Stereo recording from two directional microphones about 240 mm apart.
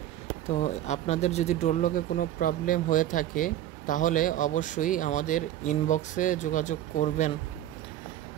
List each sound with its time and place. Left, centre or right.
0.5 s speech: left